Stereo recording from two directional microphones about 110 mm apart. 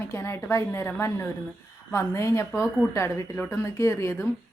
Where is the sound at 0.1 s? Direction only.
25° left (ahead or behind).